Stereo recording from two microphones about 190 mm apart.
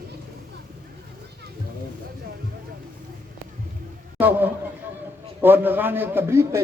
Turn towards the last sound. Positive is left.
turn(degrees=-15)  # may be behind; listen again after turning